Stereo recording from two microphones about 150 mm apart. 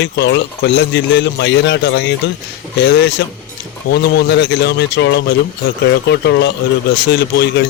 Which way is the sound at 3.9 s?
90° left.